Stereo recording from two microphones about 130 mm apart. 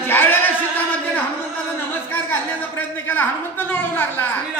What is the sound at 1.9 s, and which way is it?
A man's voice, 15° left (ahead or behind).